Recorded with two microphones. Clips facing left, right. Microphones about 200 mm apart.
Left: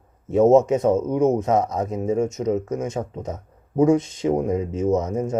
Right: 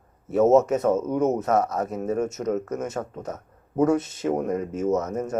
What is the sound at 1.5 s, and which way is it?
Speech, 15° left (ahead or behind).